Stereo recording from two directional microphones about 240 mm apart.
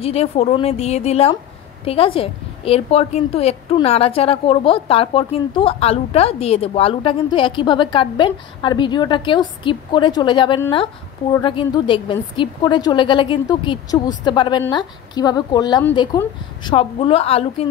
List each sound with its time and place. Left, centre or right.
0.0 s a woman's voice: left